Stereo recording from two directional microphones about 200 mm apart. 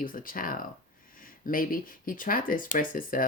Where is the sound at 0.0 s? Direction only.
45° left (ahead or behind).